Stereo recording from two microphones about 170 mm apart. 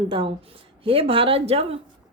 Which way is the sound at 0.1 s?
30° right (ahead or behind).